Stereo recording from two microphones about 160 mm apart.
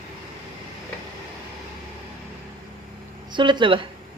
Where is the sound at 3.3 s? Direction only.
30° right (ahead or behind).